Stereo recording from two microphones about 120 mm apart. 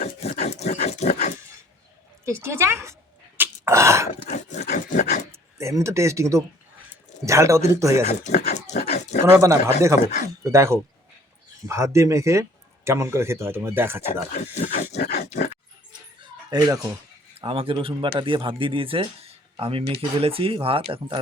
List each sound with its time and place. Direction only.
0.0 s dog: 65° left (ahead or behind)
2.2 s speech: 20° right (ahead or behind)
3.3 s a sound: 15° right (ahead or behind)
4.3 s rub: 90° left
5.3 s speech: 25° right (ahead or behind)
8.0 s pig: 80° left
9.2 s speech: 25° right (ahead or behind)
14.3 s speech: 75° left (ahead or behind)
14.9 s grunt: 70° left (ahead or behind)
16.5 s speech: 30° right (ahead or behind)
17.4 s speech: 50° right (ahead or behind)